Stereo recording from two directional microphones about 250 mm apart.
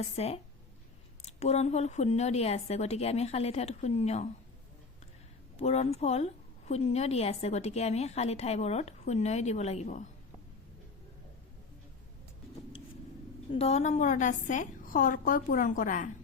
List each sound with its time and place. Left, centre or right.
0.2 s a woman's voice: left
5.5 s a woman's voice: left
13.5 s a woman's voice: left